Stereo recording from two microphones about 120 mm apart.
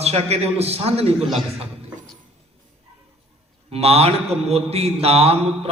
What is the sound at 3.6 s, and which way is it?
A man's voice, 55° right (ahead or behind).